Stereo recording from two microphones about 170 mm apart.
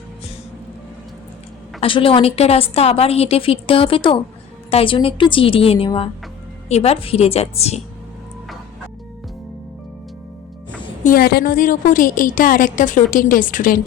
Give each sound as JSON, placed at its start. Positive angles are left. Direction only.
{"t": 1.8, "sound": "a woman's voice", "side_deg": 30}
{"t": 11.0, "sound": "a woman's voice", "side_deg": 60}